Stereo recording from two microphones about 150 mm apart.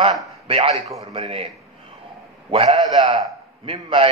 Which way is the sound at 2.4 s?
40° right (ahead or behind).